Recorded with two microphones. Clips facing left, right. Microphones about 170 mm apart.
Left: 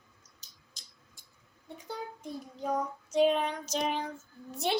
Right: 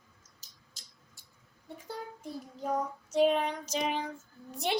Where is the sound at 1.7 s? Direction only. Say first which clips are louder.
Left 1 dB; 5° right (ahead or behind).